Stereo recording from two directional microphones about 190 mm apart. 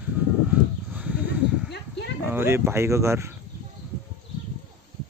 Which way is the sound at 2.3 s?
10° right (ahead or behind).